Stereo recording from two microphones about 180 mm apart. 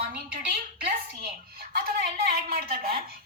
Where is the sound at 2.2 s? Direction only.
55° right (ahead or behind).